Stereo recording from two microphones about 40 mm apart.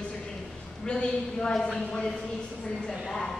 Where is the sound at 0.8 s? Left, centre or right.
Left.